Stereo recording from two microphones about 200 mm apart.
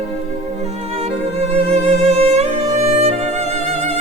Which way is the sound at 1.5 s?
30° right (ahead or behind).